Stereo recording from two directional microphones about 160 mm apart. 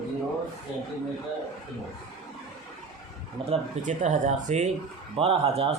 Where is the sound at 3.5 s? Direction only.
50° right (ahead or behind).